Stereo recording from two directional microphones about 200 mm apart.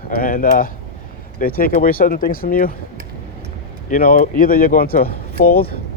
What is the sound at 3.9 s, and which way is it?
Speech, 45° left (ahead or behind).